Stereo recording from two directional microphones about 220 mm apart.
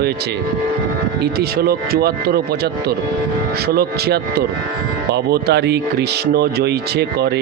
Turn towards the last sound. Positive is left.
turn(degrees=-50)  # may be behind; listen again after turning